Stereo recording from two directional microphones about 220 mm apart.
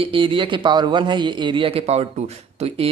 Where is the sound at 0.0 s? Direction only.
25° right (ahead or behind).